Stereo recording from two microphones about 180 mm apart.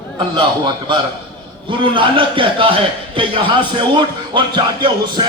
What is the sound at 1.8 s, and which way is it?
A man's voice, 30° right (ahead or behind).